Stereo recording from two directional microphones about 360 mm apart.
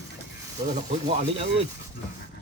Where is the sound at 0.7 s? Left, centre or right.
Centre.